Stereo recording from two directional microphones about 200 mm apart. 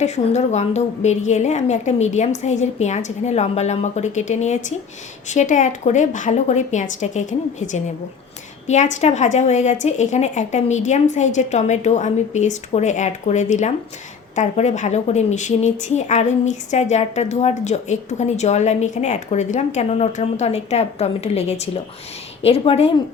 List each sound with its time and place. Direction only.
0.0 s a woman's voice: 35° left (ahead or behind)